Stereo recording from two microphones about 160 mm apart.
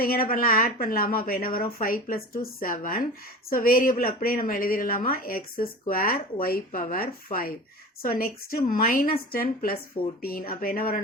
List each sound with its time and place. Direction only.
0.0 s a woman's voice: 65° left (ahead or behind)